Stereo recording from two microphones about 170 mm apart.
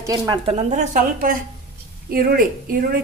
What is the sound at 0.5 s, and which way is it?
A woman's voice, 45° right (ahead or behind).